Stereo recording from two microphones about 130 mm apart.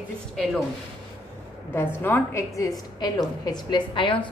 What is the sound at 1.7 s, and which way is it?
A woman's voice, 15° left (ahead or behind).